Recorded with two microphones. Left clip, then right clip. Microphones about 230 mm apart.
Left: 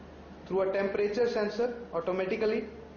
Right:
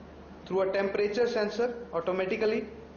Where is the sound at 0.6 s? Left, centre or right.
Centre.